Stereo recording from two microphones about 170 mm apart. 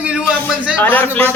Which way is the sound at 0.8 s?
10° left (ahead or behind).